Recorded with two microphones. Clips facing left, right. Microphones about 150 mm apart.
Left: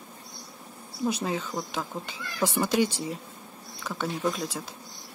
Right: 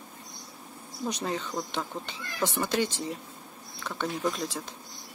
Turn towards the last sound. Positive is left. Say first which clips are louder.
# left 1 dB
turn(degrees=0)  # may be behind; listen again after turning